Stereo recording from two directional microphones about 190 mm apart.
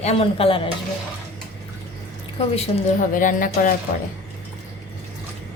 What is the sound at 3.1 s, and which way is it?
Speech, 45° left (ahead or behind).